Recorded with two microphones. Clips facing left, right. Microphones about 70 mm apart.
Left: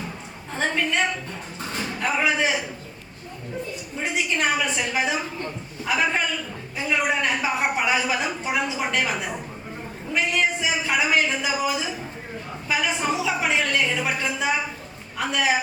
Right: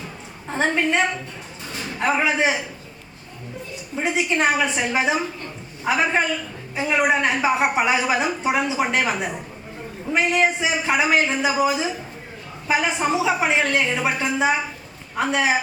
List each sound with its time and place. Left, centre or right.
0.5 s a woman's voice: right
3.9 s a woman's voice: right